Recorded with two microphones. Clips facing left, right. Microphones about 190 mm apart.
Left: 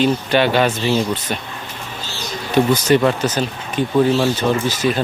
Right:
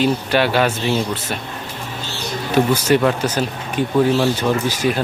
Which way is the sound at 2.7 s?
10° right (ahead or behind).